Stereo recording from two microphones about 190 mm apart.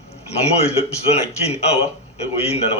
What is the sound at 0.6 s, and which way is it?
A man's voice, 30° left (ahead or behind).